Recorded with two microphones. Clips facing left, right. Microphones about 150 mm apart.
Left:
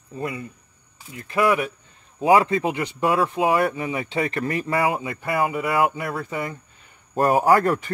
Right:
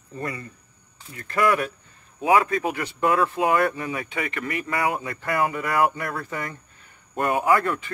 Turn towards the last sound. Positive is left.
turn(degrees=40)  # may be behind; listen again after turning